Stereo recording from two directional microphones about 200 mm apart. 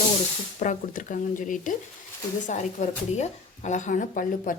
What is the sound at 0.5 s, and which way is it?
Speech, 40° left (ahead or behind).